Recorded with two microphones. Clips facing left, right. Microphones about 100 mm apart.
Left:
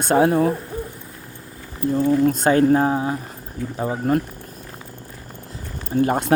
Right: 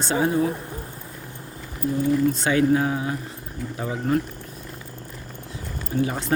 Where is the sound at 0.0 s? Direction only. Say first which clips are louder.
Left 5 dB; 60° left (ahead or behind).